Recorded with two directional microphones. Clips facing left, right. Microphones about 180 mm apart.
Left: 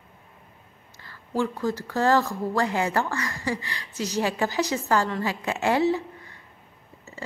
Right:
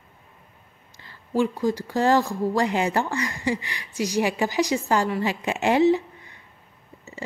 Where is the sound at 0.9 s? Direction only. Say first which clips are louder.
Right 4 dB; 15° right (ahead or behind).